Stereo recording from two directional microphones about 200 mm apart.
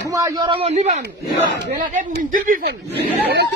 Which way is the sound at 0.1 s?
20° right (ahead or behind).